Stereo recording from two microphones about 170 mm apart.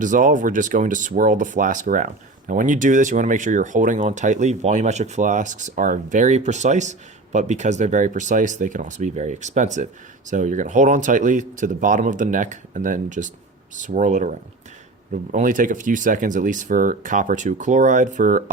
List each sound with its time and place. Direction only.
0.0 s speech: 50° right (ahead or behind)